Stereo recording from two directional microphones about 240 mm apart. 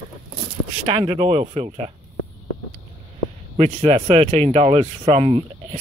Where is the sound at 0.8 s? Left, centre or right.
Right.